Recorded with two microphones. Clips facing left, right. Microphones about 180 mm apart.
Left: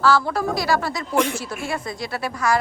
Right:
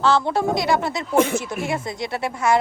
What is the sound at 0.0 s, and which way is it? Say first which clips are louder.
Speech: right 1 dB; 20° right (ahead or behind).